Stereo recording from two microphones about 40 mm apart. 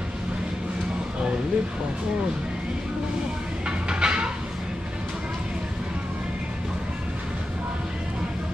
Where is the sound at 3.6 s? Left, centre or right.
Right.